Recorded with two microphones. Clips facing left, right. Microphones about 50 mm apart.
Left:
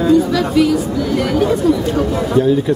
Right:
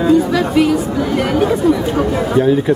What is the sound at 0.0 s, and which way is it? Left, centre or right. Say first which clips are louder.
Speech: even; centre.